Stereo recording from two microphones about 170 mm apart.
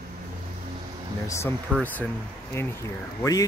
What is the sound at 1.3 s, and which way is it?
Speech, 15° left (ahead or behind).